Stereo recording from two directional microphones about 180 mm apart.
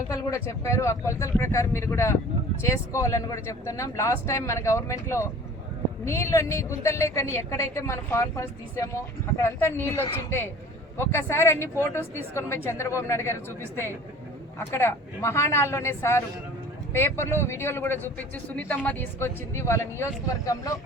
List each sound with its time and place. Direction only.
0.1 s a woman's voice: 15° left (ahead or behind)
14.7 s a woman's voice: 15° left (ahead or behind)